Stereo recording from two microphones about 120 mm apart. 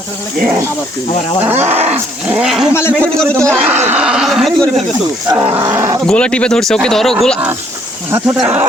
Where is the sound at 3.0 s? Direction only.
10° left (ahead or behind).